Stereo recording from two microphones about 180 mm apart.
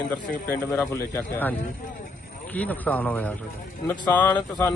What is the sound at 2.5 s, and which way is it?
Speech, 10° left (ahead or behind).